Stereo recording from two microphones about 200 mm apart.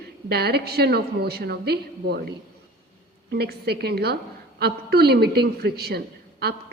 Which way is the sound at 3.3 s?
55° right (ahead or behind).